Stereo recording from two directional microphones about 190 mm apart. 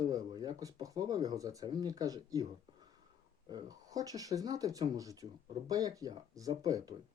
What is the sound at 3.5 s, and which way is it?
Speech, 20° right (ahead or behind).